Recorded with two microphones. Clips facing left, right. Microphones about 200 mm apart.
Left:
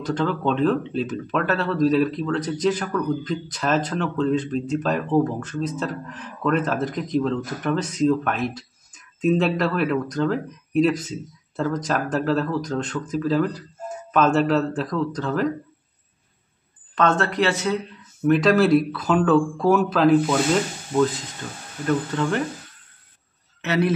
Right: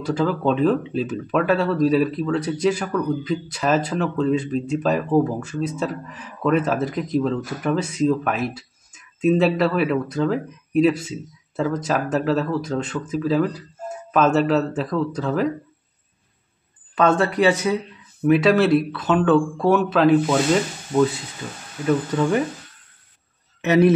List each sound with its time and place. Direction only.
0.0 s speech: 5° right (ahead or behind)
16.9 s speech: 10° right (ahead or behind)
21.8 s speech: 10° right (ahead or behind)
23.6 s speech: 15° right (ahead or behind)